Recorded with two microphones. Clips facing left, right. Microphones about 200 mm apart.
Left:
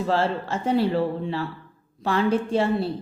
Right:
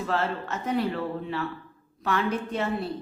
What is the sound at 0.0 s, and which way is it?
A woman's voice, 30° left (ahead or behind).